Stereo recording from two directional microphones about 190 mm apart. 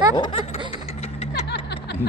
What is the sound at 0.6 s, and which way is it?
Vehicle, 30° left (ahead or behind).